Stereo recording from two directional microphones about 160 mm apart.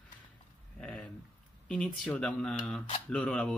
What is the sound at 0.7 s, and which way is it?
Speech, 5° left (ahead or behind).